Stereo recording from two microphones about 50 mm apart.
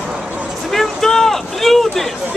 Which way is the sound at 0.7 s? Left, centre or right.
Centre.